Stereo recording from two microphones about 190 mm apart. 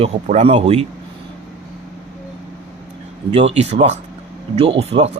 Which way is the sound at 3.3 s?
35° right (ahead or behind).